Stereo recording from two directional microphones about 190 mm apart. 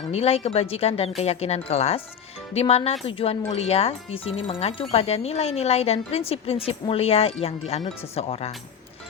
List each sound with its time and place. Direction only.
0.1 s speech: 35° left (ahead or behind)